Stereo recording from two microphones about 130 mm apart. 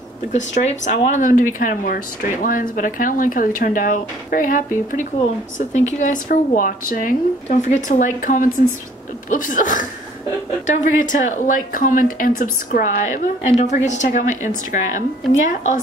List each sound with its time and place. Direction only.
0.3 s speech: 65° left (ahead or behind); by 5.0 s 90° left
5.7 s speech: 65° left (ahead or behind); by 9.8 s 85° left
10.7 s speech: 75° left (ahead or behind)